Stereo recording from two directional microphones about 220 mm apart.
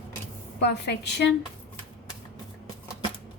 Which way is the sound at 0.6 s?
50° left (ahead or behind).